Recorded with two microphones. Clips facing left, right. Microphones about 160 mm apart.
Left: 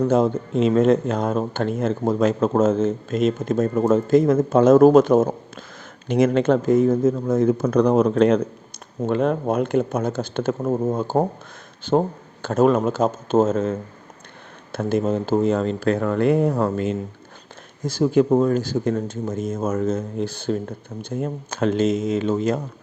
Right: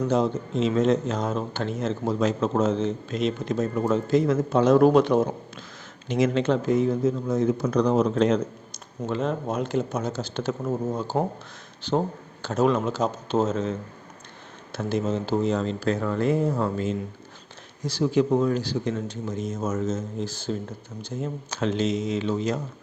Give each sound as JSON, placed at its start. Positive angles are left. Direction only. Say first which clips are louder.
{"t": 0.0, "sound": "speech", "louder": "left 5 dB", "side_deg": 55}
{"t": 17.8, "sound": "speech", "louder": "left 5 dB", "side_deg": 50}